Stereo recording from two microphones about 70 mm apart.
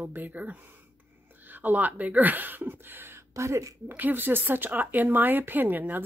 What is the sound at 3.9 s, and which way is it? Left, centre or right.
Speech, right.